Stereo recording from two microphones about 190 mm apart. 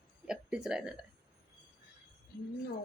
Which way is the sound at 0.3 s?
5° right (ahead or behind).